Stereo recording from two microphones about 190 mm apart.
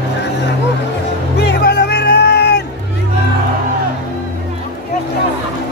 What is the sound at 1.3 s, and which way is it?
Music, 60° left (ahead or behind).